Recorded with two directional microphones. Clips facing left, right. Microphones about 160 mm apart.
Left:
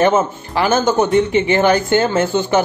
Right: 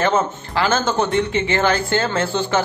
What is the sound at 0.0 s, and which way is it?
Speech, 20° left (ahead or behind).